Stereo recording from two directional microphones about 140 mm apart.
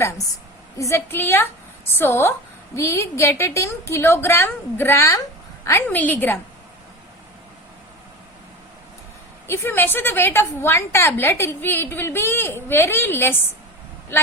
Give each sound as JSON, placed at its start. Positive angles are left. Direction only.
{"t": 0.8, "sound": "a woman's voice", "side_deg": 20}
{"t": 9.5, "sound": "a woman's voice", "side_deg": 15}